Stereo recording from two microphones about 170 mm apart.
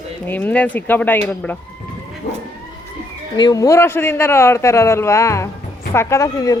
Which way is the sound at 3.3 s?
25° left (ahead or behind).